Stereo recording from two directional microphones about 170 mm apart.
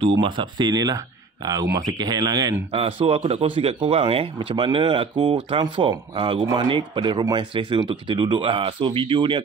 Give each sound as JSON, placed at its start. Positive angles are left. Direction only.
{"t": 0.2, "sound": "speech", "side_deg": -25}
{"t": 2.7, "sound": "speech", "side_deg": -35}